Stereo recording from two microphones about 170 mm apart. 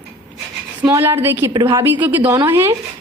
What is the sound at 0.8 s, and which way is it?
A woman's voice, 15° right (ahead or behind).